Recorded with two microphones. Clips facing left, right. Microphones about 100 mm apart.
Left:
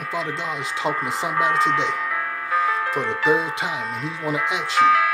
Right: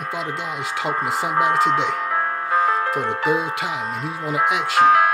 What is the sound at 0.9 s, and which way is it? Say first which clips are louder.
Speech: right 2 dB; 25° right (ahead or behind).